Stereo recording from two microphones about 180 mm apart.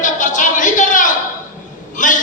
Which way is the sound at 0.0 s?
45° left (ahead or behind).